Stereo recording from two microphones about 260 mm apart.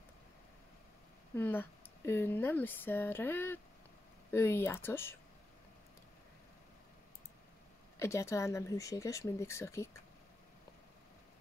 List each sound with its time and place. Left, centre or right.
1.3 s speech: centre
8.0 s speech: centre